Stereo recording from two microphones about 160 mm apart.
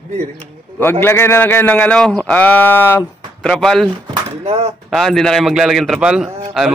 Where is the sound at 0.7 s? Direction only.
15° left (ahead or behind).